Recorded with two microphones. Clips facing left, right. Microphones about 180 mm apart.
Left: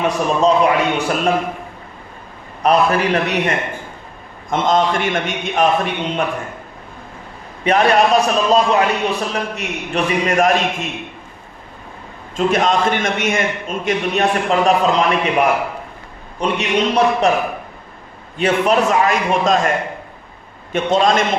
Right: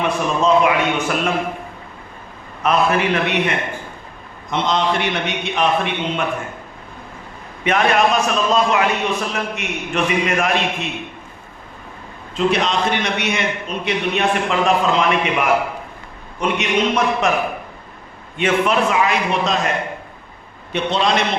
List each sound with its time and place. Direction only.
0.0 s a man's voice: 40° left (ahead or behind)
2.6 s a man's voice: 40° left (ahead or behind)
7.6 s a man's voice: 35° left (ahead or behind)
12.4 s a man's voice: 45° left (ahead or behind)
18.3 s a man's voice: 35° left (ahead or behind)
20.7 s a man's voice: 45° left (ahead or behind)